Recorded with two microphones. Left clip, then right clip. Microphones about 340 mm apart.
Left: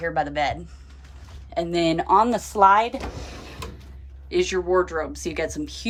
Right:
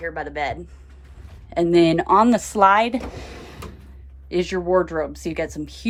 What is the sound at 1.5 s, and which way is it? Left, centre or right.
Speech, centre.